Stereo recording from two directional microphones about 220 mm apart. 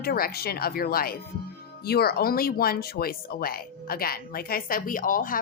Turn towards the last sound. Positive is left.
turn(degrees=40)  # may be behind; listen again after turning